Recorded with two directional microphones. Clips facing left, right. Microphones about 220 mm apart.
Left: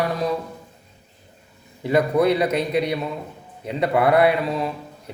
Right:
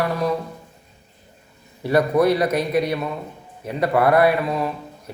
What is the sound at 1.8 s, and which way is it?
Speech, 15° left (ahead or behind).